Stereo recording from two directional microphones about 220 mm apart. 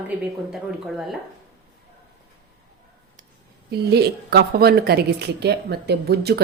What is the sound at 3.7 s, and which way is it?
A woman's voice, 45° right (ahead or behind).